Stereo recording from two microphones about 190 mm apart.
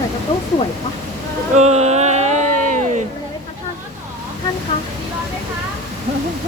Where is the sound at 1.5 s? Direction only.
35° right (ahead or behind).